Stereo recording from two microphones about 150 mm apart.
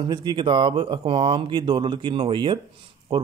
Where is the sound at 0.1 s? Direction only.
30° right (ahead or behind).